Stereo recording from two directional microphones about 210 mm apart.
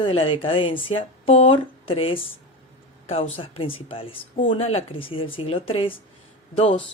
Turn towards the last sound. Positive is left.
turn(degrees=25)  # may be behind; listen again after turning